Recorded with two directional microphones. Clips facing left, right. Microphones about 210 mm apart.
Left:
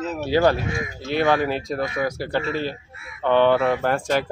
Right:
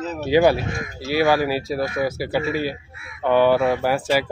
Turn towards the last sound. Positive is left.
turn(degrees=-5)  # may be behind; listen again after turning